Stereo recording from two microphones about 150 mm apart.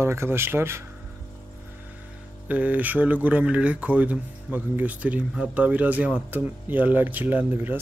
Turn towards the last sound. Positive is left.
turn(degrees=-10)  # may be behind; listen again after turning